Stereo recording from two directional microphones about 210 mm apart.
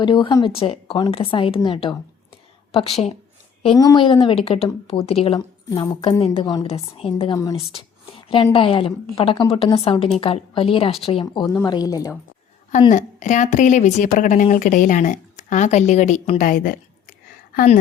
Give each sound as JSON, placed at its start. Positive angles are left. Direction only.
{"t": 0.0, "sound": "speech", "side_deg": 20}
{"t": 12.9, "sound": "speech", "side_deg": 35}
{"t": 16.5, "sound": "a sound", "side_deg": 40}